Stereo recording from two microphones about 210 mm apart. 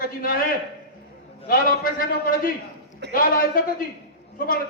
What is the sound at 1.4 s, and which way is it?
A man's voice, 45° left (ahead or behind).